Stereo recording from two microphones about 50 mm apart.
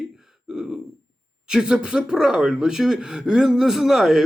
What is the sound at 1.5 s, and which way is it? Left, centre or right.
Speech, centre.